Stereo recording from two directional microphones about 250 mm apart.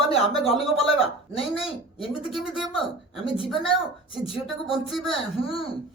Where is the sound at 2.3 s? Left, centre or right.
Centre.